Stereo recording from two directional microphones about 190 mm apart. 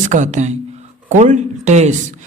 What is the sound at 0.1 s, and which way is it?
Speech, 40° right (ahead or behind).